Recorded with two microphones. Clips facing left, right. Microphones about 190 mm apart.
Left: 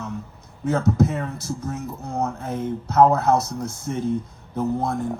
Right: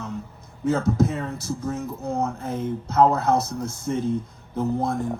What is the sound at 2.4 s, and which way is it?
Speech, 60° left (ahead or behind).